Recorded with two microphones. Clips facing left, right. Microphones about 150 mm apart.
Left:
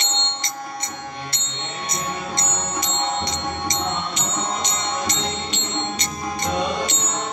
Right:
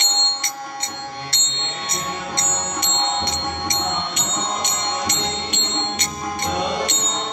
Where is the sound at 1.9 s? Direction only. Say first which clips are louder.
Even; 60° right (ahead or behind).